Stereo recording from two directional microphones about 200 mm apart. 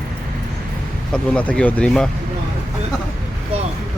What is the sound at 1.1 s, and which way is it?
Speech, 5° left (ahead or behind).